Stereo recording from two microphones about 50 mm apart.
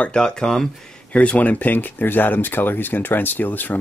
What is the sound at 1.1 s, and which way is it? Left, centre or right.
Speech, left.